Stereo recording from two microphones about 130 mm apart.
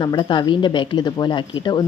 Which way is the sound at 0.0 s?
35° left (ahead or behind).